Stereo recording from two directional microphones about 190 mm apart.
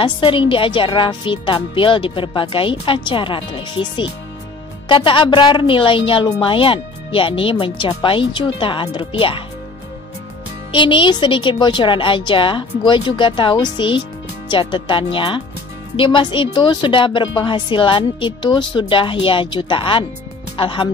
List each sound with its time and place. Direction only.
0.0 s a woman's voice: 25° left (ahead or behind)
10.7 s a woman's voice: 25° left (ahead or behind)